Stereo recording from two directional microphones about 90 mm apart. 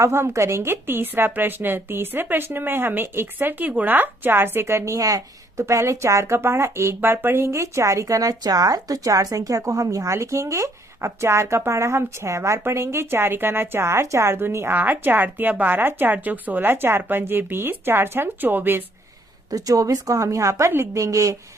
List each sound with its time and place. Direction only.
0.0 s a woman's voice: 30° right (ahead or behind)
19.5 s a woman's voice: 45° right (ahead or behind)